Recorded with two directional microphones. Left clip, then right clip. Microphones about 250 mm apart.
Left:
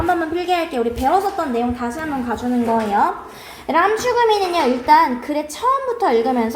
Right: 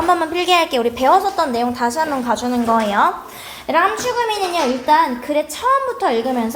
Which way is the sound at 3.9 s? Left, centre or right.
Right.